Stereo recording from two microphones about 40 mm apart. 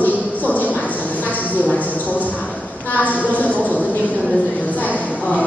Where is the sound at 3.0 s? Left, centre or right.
Left.